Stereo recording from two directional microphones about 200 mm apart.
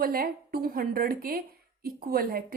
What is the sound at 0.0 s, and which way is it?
Speech, 45° right (ahead or behind).